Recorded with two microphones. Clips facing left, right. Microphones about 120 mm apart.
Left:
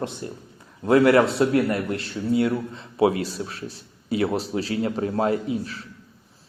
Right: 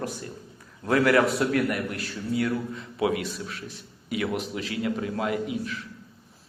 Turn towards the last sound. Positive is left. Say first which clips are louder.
# left 3 dB
turn(degrees=35)  # may be behind; listen again after turning